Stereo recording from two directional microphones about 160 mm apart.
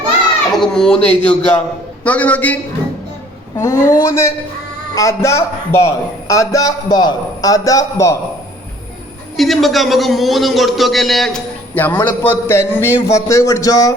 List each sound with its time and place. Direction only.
0.5 s a man's voice: 5° left (ahead or behind)
3.6 s a man's voice: 20° left (ahead or behind)
9.4 s a man's voice: centre (ahead or behind); by 13.9 s 20° left (ahead or behind)